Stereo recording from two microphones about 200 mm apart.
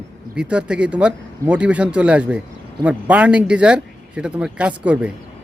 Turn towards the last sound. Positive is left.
turn(degrees=-5)  # may be behind; listen again after turning